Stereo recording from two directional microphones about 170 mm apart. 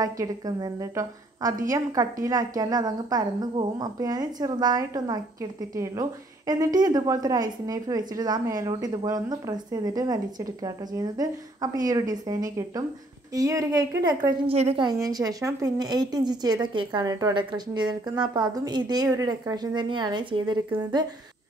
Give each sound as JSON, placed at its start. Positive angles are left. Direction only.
{"t": 0.0, "sound": "a woman's voice", "side_deg": -20}
{"t": 14.5, "sound": "a woman's voice", "side_deg": -35}
{"t": 14.9, "sound": "a woman's voice", "side_deg": -20}